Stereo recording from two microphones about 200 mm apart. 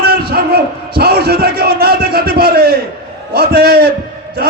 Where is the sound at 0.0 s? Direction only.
50° right (ahead or behind).